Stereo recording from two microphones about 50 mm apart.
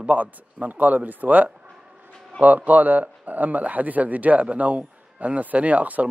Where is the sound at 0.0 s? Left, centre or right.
Right.